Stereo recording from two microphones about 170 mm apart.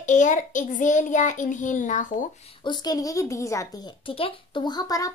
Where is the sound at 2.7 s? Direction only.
25° left (ahead or behind).